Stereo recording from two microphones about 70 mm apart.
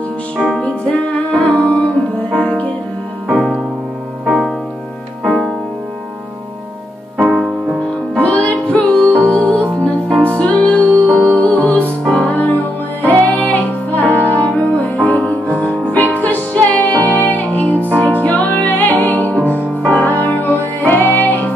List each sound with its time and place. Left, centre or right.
0.4 s music: centre
0.9 s music: left
3.3 s music: centre
7.2 s music: centre
8.2 s music: centre